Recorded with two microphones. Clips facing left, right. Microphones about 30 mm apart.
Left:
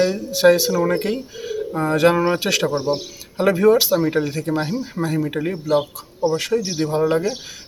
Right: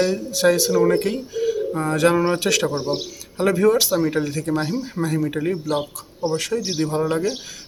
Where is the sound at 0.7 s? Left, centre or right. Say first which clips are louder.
Right 2 dB; centre.